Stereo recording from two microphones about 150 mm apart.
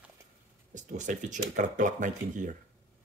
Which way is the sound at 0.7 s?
55° right (ahead or behind).